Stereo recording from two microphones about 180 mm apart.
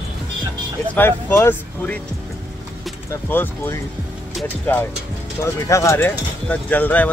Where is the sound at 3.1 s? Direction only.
10° left (ahead or behind).